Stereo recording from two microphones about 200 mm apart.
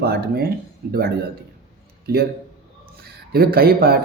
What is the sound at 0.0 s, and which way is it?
Speech, 50° right (ahead or behind).